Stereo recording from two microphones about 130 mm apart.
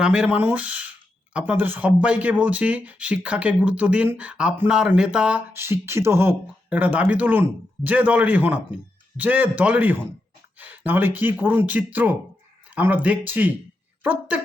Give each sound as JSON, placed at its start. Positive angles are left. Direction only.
{"t": 0.0, "sound": "speech", "side_deg": -10}
{"t": 5.5, "sound": "speech", "side_deg": -20}